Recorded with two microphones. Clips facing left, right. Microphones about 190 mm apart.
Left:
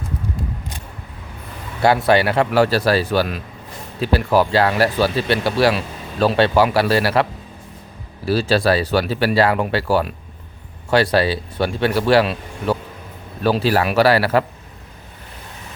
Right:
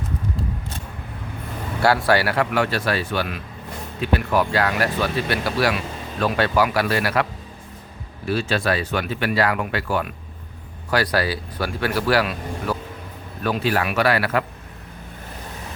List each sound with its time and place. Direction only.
1.8 s a man's voice: 20° left (ahead or behind)